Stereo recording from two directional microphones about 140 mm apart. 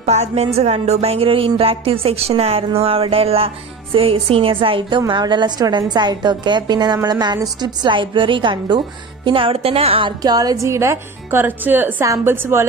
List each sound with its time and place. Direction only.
0.0 s speech: 50° right (ahead or behind); by 12.6 s 15° right (ahead or behind)